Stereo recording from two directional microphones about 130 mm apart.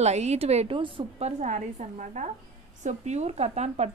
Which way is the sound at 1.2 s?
65° right (ahead or behind).